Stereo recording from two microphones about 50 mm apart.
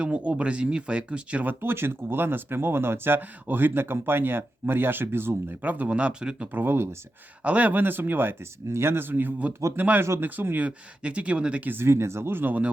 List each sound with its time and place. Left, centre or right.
0.0 s speech: right
1.5 s speech: right
5.6 s speech: right
6.5 s speech: right
7.4 s speech: right
8.7 s speech: right
10.7 s speech: right
11.8 s speech: right